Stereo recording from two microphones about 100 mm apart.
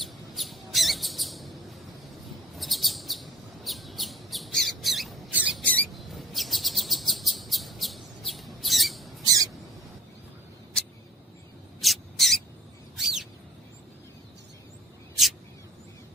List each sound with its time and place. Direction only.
0.0 s a sound: centre (ahead or behind)
2.6 s chirp: centre (ahead or behind)
5.3 s rodents: 15° right (ahead or behind)
5.6 s rodents: 15° left (ahead or behind)
6.0 s chirp: centre (ahead or behind)
9.2 s bird: 40° right (ahead or behind)
11.8 s a sound: centre (ahead or behind)
13.0 s bird: 5° right (ahead or behind)